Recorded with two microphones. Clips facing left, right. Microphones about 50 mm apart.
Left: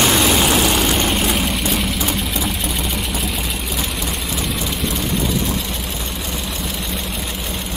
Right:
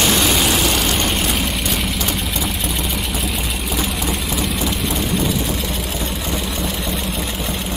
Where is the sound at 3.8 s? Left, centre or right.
Centre.